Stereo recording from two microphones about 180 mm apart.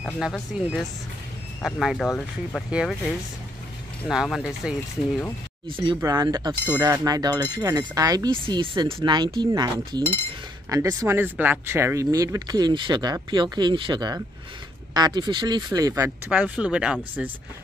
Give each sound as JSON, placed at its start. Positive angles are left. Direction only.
{"t": 0.2, "sound": "speech", "side_deg": 0}
{"t": 4.1, "sound": "speech", "side_deg": -5}
{"t": 5.7, "sound": "speech", "side_deg": -30}
{"t": 15.9, "sound": "speech", "side_deg": -10}